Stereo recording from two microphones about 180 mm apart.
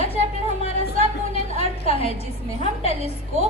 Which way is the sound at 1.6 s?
35° left (ahead or behind).